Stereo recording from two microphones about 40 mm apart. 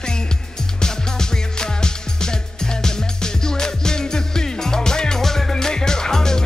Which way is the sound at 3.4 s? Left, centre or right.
Centre.